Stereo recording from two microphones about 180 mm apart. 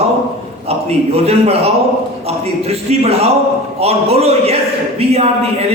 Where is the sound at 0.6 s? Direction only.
35° right (ahead or behind).